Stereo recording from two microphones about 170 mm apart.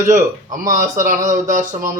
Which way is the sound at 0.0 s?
50° right (ahead or behind).